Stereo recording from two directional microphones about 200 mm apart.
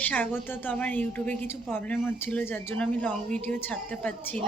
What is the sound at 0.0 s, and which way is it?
A woman's voice, 10° left (ahead or behind).